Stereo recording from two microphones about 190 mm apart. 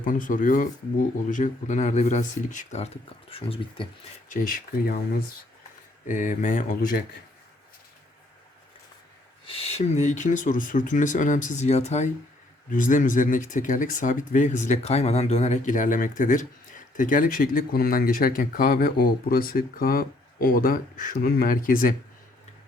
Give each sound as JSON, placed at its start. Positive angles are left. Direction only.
{"t": 0.0, "sound": "speech", "side_deg": 45}
{"t": 4.3, "sound": "speech", "side_deg": 45}
{"t": 6.1, "sound": "speech", "side_deg": 40}
{"t": 9.5, "sound": "speech", "side_deg": 30}